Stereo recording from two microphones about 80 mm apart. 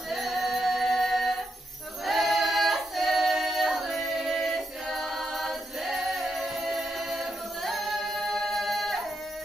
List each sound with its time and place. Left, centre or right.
0.1 s singing: centre
2.0 s choir: centre
7.6 s carnatic music: centre